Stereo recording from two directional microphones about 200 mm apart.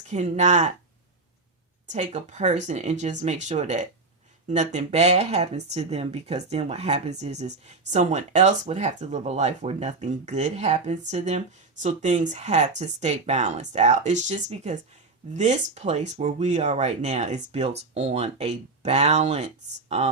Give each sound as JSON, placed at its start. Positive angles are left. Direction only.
{"t": 0.1, "sound": "speech", "side_deg": -35}
{"t": 1.9, "sound": "speech", "side_deg": -35}